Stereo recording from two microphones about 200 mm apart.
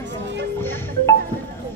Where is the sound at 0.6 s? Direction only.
10° left (ahead or behind).